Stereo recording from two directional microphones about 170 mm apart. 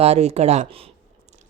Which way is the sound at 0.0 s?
40° right (ahead or behind).